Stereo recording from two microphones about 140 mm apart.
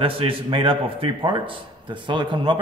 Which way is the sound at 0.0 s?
40° right (ahead or behind).